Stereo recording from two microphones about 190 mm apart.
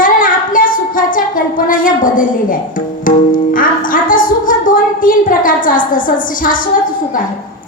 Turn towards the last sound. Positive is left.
turn(degrees=45)  # may be behind; listen again after turning